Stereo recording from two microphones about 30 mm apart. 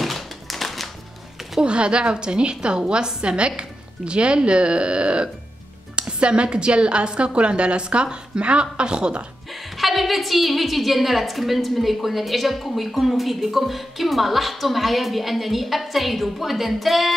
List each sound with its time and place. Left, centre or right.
0.0 s tap: centre
1.6 s a woman's voice: right
9.5 s a woman's voice: centre